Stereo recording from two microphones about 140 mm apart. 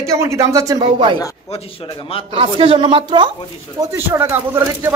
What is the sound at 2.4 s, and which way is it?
Speech, 40° right (ahead or behind).